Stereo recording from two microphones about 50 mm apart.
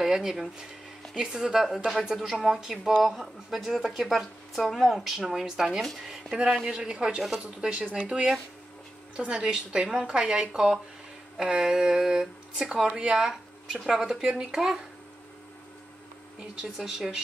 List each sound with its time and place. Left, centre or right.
0.0 s speech: centre
6.7 s speech: centre
7.2 s speech: centre
7.6 s a woman's voice: right
9.1 s a woman's voice: centre
16.6 s speech: centre